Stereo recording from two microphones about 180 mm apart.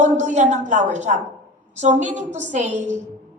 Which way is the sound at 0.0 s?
40° right (ahead or behind).